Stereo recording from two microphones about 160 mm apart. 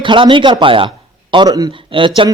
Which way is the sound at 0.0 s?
30° right (ahead or behind).